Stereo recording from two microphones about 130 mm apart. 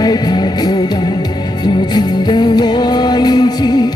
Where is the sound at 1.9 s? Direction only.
35° left (ahead or behind).